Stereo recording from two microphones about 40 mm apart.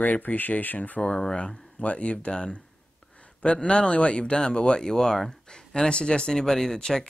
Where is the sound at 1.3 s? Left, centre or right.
Left.